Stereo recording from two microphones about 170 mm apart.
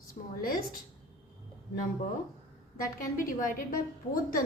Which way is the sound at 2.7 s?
55° left (ahead or behind).